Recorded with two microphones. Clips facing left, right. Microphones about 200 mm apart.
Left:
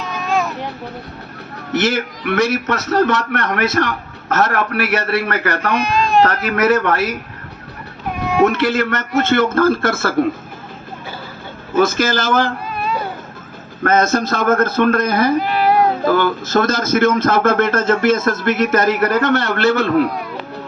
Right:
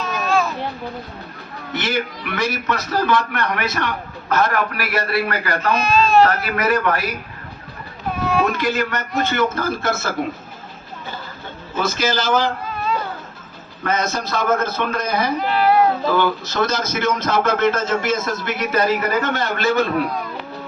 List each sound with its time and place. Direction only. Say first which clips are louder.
0.0 s vehicle: even; 15° left (ahead or behind)
1.7 s a man's voice: left 5 dB; 80° left
5.7 s speech: right 1 dB; 15° left (ahead or behind)
6.2 s a man's voice: left 4 dB; 75° left (ahead or behind)
8.1 s baby cry: left 5 dB; 15° left (ahead or behind)
8.4 s a man's voice: left 4 dB; 75° left (ahead or behind)
9.4 s speech: left 6 dB; 50° left (ahead or behind)
11.7 s speech: left 6 dB; 50° left (ahead or behind)
13.8 s speech: left 7 dB; 50° left (ahead or behind)
18.9 s a man's voice: left 5 dB; 70° left (ahead or behind)